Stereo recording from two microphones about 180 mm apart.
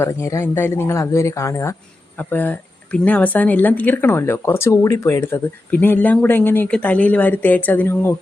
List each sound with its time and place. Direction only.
0.0 s speech: 15° left (ahead or behind)